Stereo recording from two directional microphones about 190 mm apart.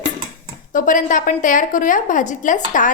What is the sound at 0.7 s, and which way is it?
A woman's voice, 45° left (ahead or behind).